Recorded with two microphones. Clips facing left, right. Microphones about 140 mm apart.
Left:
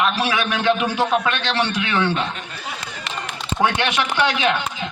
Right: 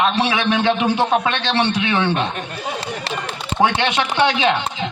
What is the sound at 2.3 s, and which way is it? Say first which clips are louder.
Speech: right 5 dB; 55° right (ahead or behind).